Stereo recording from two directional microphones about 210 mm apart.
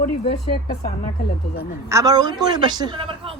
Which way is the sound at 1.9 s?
15° right (ahead or behind).